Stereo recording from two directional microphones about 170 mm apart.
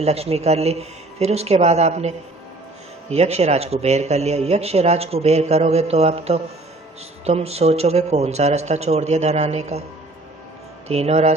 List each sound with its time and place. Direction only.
0.0 s a man's voice: 35° right (ahead or behind)
10.8 s a man's voice: 40° right (ahead or behind)